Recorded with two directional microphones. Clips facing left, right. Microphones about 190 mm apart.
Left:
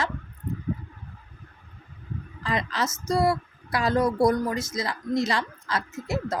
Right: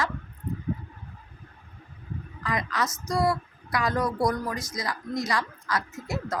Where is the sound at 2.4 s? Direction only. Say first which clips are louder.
Left 1 dB; 25° left (ahead or behind).